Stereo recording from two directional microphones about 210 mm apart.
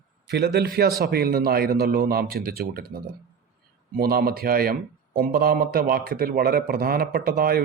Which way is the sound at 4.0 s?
45° right (ahead or behind).